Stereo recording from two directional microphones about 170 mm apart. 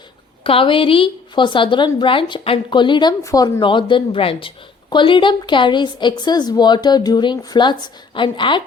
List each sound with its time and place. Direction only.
0.4 s a woman's voice: 30° left (ahead or behind)